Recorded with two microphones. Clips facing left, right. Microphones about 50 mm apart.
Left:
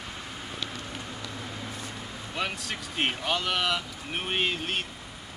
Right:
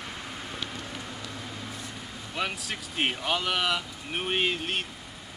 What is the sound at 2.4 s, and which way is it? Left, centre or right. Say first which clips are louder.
Speech: even; centre.